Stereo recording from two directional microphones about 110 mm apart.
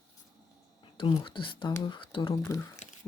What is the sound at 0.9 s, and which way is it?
Speech, 50° left (ahead or behind).